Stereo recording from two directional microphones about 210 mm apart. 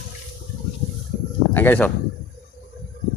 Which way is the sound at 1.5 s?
10° left (ahead or behind).